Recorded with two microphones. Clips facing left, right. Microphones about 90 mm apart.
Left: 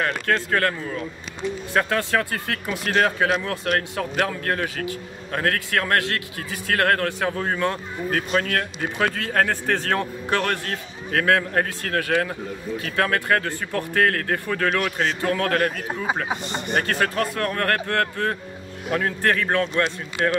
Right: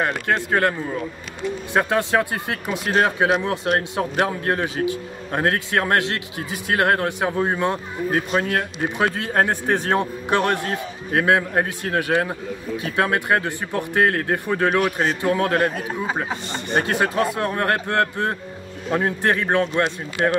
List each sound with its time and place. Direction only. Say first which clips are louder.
0.0 s speech: right 1 dB; 20° right (ahead or behind)